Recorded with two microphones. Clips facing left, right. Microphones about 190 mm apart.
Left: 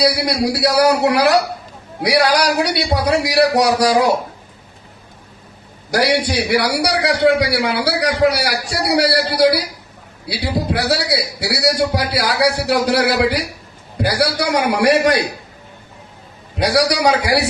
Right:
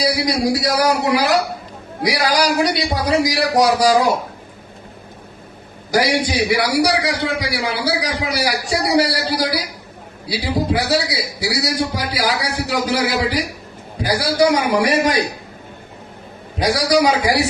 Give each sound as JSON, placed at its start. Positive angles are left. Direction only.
{"t": 0.6, "sound": "a man's voice", "side_deg": 70}
{"t": 5.9, "sound": "a man's voice", "side_deg": 65}
{"t": 16.6, "sound": "a man's voice", "side_deg": 70}